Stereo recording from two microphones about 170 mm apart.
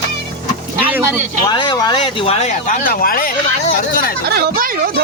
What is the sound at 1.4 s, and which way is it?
Speech, 25° left (ahead or behind).